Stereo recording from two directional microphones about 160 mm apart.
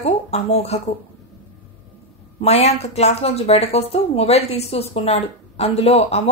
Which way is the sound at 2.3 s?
40° left (ahead or behind).